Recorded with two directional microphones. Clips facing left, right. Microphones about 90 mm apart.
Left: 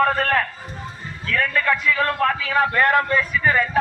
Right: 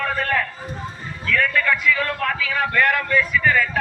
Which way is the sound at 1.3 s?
25° left (ahead or behind).